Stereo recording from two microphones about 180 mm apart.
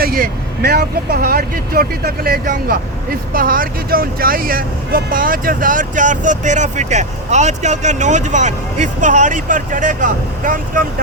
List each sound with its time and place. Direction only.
0.0 s speech: 55° right (ahead or behind)